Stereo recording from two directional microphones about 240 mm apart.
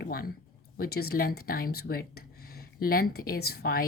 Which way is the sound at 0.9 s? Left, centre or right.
Left.